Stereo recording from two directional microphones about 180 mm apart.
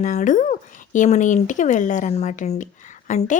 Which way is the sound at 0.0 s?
45° left (ahead or behind).